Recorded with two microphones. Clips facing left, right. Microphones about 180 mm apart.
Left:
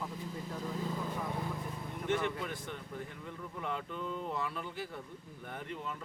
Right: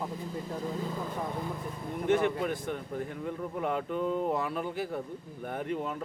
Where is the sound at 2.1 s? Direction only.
45° right (ahead or behind).